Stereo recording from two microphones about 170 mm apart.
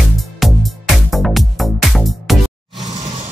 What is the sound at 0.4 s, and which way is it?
Music, centre (ahead or behind).